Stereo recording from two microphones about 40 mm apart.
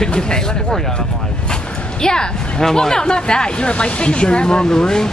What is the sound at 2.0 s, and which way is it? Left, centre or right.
Speech, centre.